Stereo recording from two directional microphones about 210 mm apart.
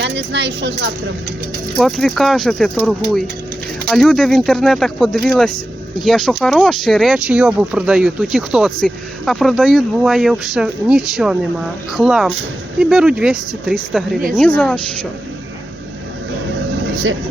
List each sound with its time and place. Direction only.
0.0 s speech: 55° right (ahead or behind)
1.8 s speech: centre (ahead or behind)
16.9 s speech: 60° right (ahead or behind)